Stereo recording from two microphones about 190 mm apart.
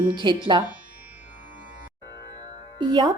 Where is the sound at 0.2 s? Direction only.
25° right (ahead or behind).